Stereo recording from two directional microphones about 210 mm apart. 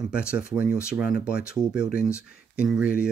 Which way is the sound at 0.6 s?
5° right (ahead or behind).